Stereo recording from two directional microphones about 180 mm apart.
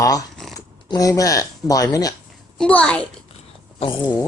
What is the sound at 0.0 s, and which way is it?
Speech, 20° left (ahead or behind).